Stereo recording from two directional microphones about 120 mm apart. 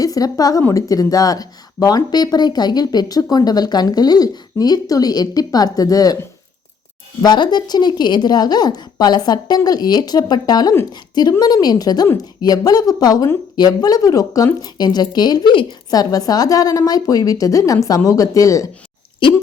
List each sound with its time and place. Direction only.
0.0 s a woman's voice: 30° left (ahead or behind)
7.2 s speech: 35° left (ahead or behind)